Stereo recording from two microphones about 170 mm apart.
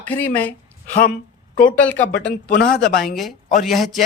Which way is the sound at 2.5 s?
60° left (ahead or behind).